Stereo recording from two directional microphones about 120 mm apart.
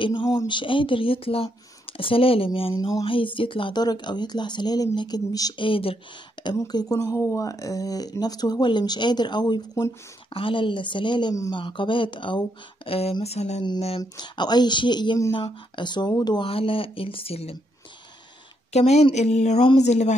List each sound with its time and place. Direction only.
0.0 s speech: 40° left (ahead or behind)
2.8 s speech: 35° left (ahead or behind)
5.7 s speech: 50° left (ahead or behind)
6.4 s speech: 40° left (ahead or behind)
13.2 s a sound: 60° left (ahead or behind)
14.0 s speech: 35° left (ahead or behind)
16.4 s speech: 50° left (ahead or behind)
18.7 s a sound: 65° left (ahead or behind)